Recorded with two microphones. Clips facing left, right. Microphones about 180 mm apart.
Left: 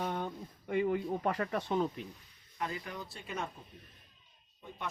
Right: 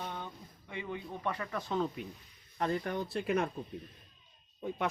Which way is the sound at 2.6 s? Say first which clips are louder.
Right 6 dB; 50° right (ahead or behind).